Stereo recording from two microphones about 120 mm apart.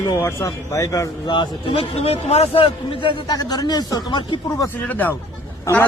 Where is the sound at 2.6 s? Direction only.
45° left (ahead or behind).